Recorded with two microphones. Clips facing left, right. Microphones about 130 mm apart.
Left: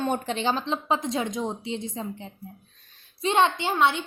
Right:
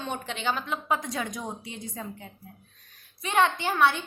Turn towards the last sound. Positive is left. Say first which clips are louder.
# left 1 dB
turn(degrees=20)  # may be behind; listen again after turning